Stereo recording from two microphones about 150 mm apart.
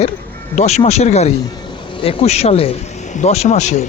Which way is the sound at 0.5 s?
45° left (ahead or behind).